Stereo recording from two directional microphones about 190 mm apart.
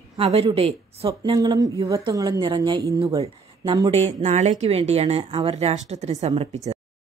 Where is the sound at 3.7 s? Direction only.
30° right (ahead or behind).